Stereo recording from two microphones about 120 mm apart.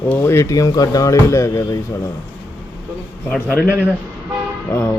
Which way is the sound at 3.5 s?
20° left (ahead or behind).